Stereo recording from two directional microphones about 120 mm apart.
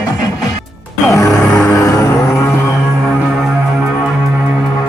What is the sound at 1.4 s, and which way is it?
Music, 10° left (ahead or behind).